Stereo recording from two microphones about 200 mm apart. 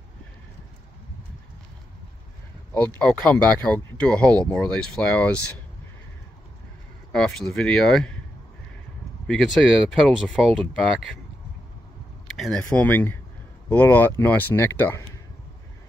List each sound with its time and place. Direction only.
2.7 s speech: 10° left (ahead or behind)
7.1 s speech: 5° left (ahead or behind)
9.3 s speech: centre (ahead or behind)
12.4 s speech: 5° left (ahead or behind)